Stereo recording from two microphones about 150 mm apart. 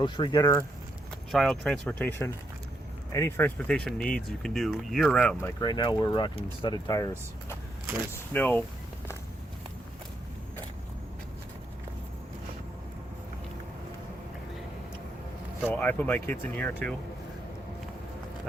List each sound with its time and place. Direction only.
0.0 s speech: 30° left (ahead or behind)
1.3 s speech: 5° left (ahead or behind)
3.7 s speech: 5° left (ahead or behind)
5.5 s speech: 30° left (ahead or behind)
8.3 s speech: 10° left (ahead or behind)
15.7 s speech: 10° left (ahead or behind)